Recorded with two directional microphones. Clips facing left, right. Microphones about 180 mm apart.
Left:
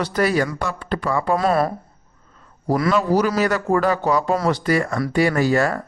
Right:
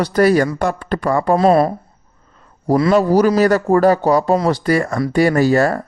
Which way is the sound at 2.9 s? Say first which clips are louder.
Right 7 dB; 40° right (ahead or behind).